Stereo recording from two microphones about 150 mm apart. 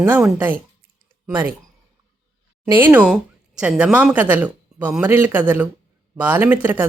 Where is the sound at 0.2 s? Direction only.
5° right (ahead or behind).